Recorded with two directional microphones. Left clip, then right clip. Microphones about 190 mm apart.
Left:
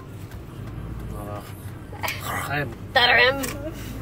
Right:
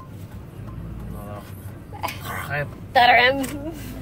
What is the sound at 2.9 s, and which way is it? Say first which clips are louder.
Speech: right 2 dB; 30° right (ahead or behind).